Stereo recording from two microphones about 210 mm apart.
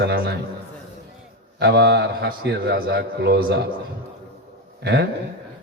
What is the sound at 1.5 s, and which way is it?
A man's voice, 55° right (ahead or behind).